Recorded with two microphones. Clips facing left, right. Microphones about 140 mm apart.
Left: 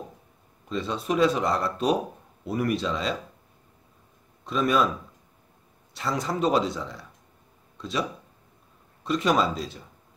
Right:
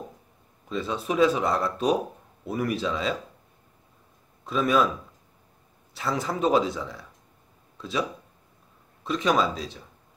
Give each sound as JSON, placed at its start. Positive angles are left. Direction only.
{"t": 0.7, "sound": "speech", "side_deg": 0}
{"t": 4.5, "sound": "speech", "side_deg": 0}
{"t": 5.9, "sound": "speech", "side_deg": 0}
{"t": 7.7, "sound": "a sound", "side_deg": 0}
{"t": 9.0, "sound": "speech", "side_deg": 0}